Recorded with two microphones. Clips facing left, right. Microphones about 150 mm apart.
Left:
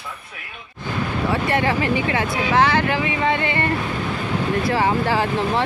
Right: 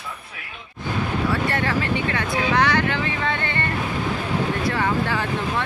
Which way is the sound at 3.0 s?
15° left (ahead or behind).